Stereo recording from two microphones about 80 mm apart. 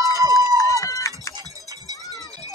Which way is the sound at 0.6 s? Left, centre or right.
Left.